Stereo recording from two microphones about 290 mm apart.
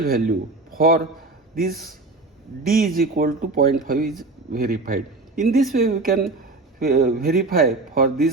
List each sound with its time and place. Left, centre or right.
0.0 s a man's voice: right
1.7 s a man's voice: centre
2.6 s a man's voice: right